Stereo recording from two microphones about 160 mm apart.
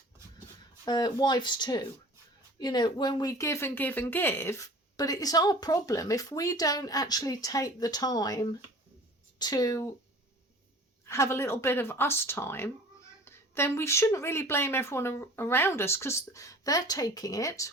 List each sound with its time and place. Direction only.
0.9 s speech: 25° left (ahead or behind)
11.0 s speech: 15° left (ahead or behind)